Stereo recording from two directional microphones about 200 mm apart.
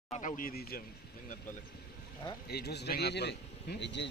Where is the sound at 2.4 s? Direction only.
55° left (ahead or behind).